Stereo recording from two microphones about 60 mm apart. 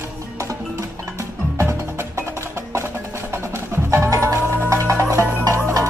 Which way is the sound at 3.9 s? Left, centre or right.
Right.